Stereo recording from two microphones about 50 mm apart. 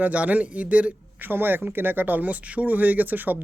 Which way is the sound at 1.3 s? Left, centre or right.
Right.